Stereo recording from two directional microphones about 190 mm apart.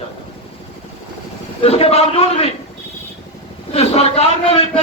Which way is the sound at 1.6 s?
30° left (ahead or behind).